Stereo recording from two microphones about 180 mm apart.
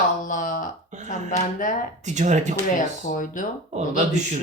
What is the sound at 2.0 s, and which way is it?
Speech, 40° right (ahead or behind).